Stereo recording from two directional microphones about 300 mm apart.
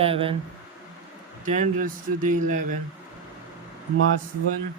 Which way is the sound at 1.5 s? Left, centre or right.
Right.